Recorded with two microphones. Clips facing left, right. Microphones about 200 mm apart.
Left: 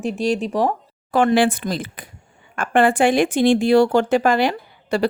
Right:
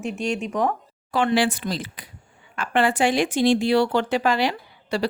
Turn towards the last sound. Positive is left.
turn(degrees=50)  # may be behind; listen again after turning